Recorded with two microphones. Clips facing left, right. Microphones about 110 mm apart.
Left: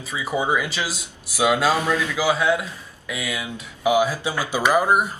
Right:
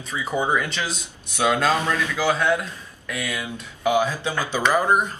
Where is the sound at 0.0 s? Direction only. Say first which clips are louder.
Even; 5° left (ahead or behind).